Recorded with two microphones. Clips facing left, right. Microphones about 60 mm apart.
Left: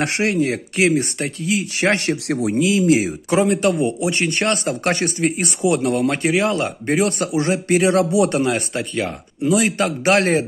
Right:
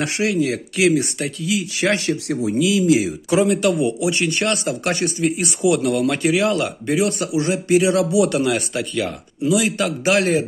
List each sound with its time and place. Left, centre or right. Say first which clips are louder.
0.0 s speech: left 1 dB; left